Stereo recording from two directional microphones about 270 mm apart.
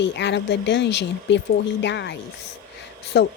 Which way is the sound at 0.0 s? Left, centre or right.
Left.